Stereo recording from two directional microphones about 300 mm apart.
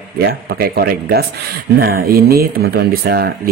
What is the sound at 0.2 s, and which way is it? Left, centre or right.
Speech, right.